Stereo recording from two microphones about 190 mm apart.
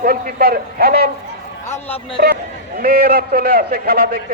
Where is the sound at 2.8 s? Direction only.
50° right (ahead or behind).